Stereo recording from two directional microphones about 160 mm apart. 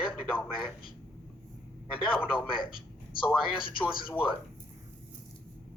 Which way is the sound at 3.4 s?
30° left (ahead or behind).